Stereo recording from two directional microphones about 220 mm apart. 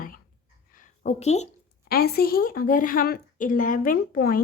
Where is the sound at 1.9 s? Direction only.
45° left (ahead or behind).